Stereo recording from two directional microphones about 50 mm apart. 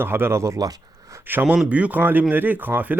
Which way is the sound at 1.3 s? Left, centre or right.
Right.